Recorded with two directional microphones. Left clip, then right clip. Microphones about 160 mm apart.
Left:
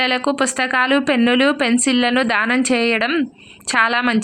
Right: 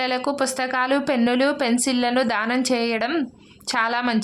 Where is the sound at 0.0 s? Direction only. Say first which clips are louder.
Left 5 dB; 20° left (ahead or behind).